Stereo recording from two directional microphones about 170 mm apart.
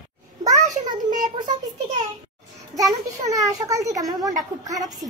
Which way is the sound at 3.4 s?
20° right (ahead or behind).